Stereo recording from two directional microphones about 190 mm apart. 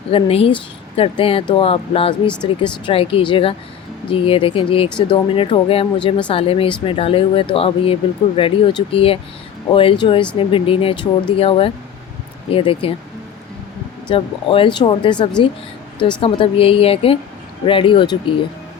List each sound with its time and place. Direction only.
0.1 s speech: 30° left (ahead or behind)
14.1 s speech: 25° left (ahead or behind)
16.2 s speech: 30° left (ahead or behind)